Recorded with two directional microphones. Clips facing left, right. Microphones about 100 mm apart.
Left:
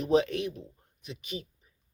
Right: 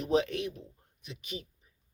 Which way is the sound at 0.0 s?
35° left (ahead or behind).